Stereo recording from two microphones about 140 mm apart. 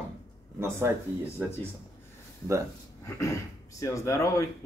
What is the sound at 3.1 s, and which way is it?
Speech, 20° left (ahead or behind).